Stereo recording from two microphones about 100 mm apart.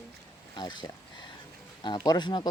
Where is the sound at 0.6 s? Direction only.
50° left (ahead or behind).